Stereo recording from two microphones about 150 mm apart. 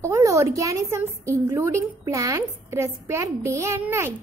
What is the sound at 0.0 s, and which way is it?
A woman's voice, 20° right (ahead or behind).